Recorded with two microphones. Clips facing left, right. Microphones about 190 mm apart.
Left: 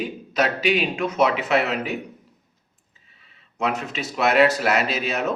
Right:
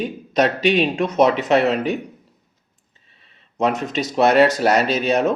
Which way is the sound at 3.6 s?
40° right (ahead or behind).